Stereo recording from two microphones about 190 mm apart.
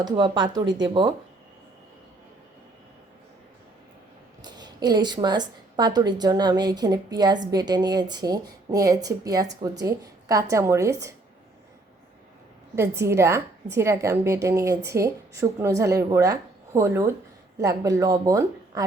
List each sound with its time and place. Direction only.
0.0 s speech: 20° right (ahead or behind)
4.4 s speech: 20° right (ahead or behind)
12.7 s speech: 15° right (ahead or behind)